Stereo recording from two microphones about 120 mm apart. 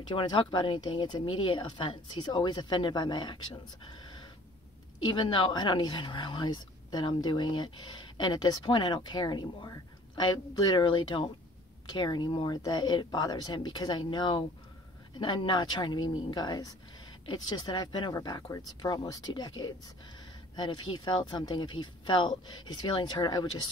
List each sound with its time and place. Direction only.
0.1 s speech: 40° left (ahead or behind)
5.1 s speech: 40° left (ahead or behind)